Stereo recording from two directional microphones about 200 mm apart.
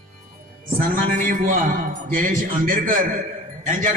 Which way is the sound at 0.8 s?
45° right (ahead or behind).